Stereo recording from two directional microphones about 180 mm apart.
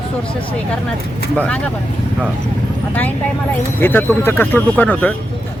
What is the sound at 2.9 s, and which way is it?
Speech, 10° left (ahead or behind).